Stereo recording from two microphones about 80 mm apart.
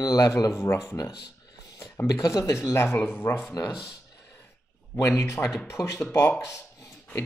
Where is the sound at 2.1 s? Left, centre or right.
Left.